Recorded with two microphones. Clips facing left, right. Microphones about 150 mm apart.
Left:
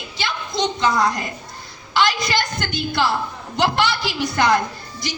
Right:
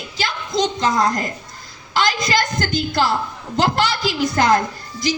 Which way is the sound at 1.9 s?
40° right (ahead or behind).